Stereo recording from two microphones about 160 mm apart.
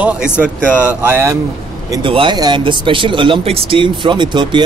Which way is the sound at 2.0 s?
30° right (ahead or behind).